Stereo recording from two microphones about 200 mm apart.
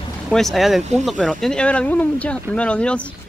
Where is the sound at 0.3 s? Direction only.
Centre (ahead or behind).